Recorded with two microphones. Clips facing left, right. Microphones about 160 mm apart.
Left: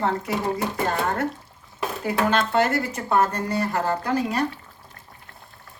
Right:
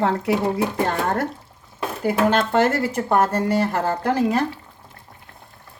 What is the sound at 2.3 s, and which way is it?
Speech, 55° right (ahead or behind).